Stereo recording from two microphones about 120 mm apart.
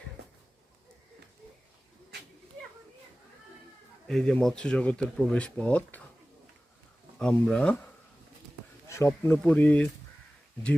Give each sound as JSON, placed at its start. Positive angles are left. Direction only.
{"t": 4.0, "sound": "speech", "side_deg": 5}
{"t": 7.2, "sound": "speech", "side_deg": 5}
{"t": 8.9, "sound": "speech", "side_deg": 20}